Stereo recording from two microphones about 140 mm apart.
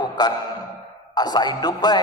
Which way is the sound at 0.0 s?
30° left (ahead or behind).